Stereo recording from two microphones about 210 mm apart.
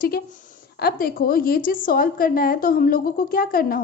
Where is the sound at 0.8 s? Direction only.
45° left (ahead or behind).